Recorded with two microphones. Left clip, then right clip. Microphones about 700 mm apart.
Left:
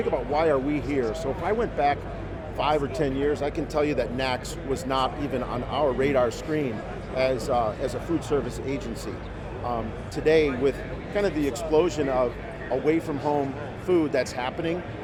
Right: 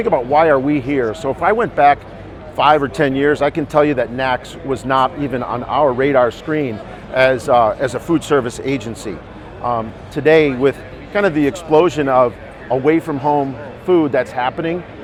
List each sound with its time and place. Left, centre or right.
0.1 s speech: right
10.2 s speech: right